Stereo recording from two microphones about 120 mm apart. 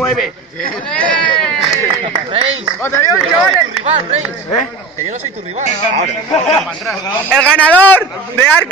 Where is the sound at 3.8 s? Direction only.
60° right (ahead or behind).